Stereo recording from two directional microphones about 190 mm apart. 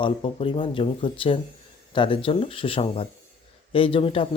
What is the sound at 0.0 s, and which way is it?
Speech, 25° left (ahead or behind).